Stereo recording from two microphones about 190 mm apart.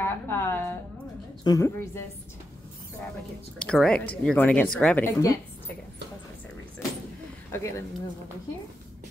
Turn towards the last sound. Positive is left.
turn(degrees=15)  # may be behind; listen again after turning